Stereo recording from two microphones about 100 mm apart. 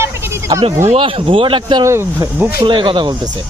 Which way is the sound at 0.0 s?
30° right (ahead or behind).